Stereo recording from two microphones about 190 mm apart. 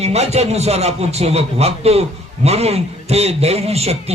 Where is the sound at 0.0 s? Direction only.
35° right (ahead or behind).